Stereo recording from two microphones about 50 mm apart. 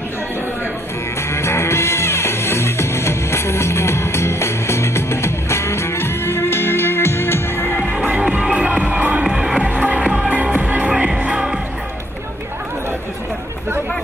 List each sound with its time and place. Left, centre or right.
1.3 s music: left
7.7 s music: left
8.0 s music: right
9.2 s music: centre
9.7 s music: right
10.9 s music: centre